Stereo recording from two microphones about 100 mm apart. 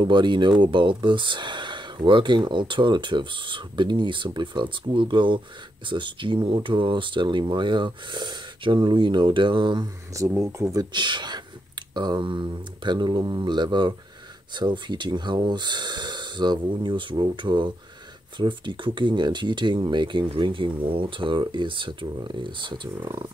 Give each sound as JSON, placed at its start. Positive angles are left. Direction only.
{"t": 0.0, "sound": "speech", "side_deg": -50}
{"t": 10.1, "sound": "speech", "side_deg": -30}
{"t": 10.9, "sound": "speech", "side_deg": -50}